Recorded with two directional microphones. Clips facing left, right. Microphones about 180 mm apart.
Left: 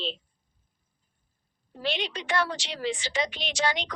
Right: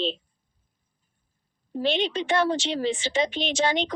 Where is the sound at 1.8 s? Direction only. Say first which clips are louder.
Right 7 dB; 25° right (ahead or behind).